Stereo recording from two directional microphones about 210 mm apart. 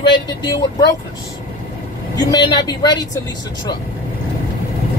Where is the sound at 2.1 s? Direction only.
20° left (ahead or behind).